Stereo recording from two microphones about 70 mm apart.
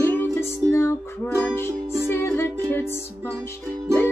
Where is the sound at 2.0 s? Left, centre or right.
Left.